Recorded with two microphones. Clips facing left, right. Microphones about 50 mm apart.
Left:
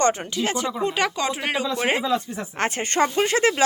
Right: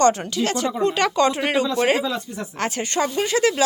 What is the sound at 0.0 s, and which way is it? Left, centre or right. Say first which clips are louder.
A woman's voice: right 3 dB; left.